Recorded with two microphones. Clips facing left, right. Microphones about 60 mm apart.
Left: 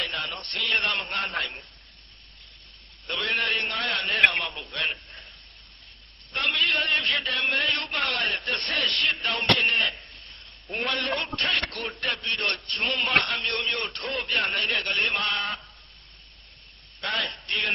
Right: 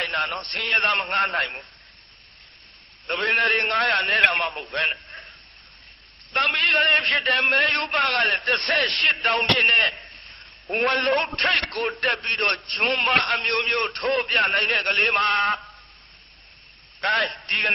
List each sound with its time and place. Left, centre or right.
0.0 s a man's voice: right
3.1 s a man's voice: right
6.3 s a man's voice: right
17.0 s a man's voice: right